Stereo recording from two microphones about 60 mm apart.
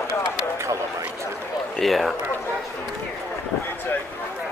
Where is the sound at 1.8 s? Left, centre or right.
Centre.